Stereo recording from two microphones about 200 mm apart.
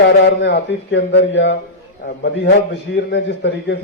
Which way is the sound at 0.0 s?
60° left (ahead or behind).